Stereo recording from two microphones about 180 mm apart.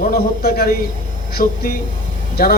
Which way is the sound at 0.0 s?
55° left (ahead or behind).